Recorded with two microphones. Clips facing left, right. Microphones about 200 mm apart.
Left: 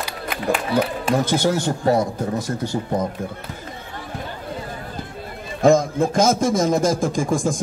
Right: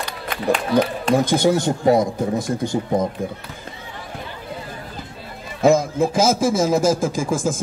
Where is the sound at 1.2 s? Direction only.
15° right (ahead or behind).